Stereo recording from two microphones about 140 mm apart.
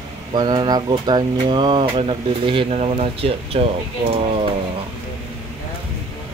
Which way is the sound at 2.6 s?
50° right (ahead or behind).